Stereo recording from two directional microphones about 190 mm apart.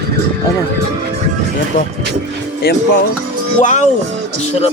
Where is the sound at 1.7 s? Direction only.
45° left (ahead or behind).